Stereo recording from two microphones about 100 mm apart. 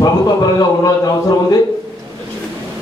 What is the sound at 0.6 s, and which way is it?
A man's voice, 40° left (ahead or behind).